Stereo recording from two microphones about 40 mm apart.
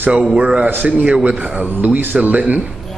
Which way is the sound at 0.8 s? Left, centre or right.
Right.